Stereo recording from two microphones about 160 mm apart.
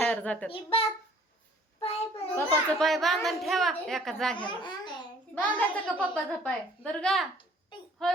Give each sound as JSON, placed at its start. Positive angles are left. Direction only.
{"t": 0.0, "sound": "a sound", "side_deg": 10}
{"t": 0.5, "sound": "a child's voice", "side_deg": 35}
{"t": 1.8, "sound": "child singing", "side_deg": 40}
{"t": 2.3, "sound": "a child's voice", "side_deg": 10}